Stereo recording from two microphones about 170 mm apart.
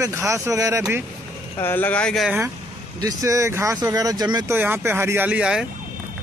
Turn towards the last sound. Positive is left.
turn(degrees=-5)  # may be behind; listen again after turning